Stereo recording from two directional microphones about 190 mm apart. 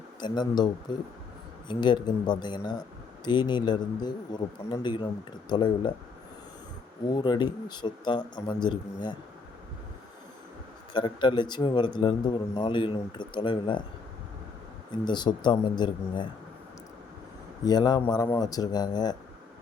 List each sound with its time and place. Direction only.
0.2 s speech: 25° left (ahead or behind)
7.1 s speech: 20° left (ahead or behind)
10.9 s speech: 25° left (ahead or behind)
15.0 s speech: 25° left (ahead or behind)
17.7 s speech: 20° left (ahead or behind)